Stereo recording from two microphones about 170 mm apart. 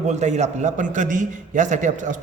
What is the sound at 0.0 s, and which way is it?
A man's voice, 40° right (ahead or behind).